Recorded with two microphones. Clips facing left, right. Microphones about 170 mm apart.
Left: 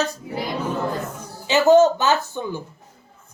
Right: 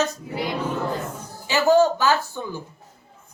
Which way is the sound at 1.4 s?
20° left (ahead or behind).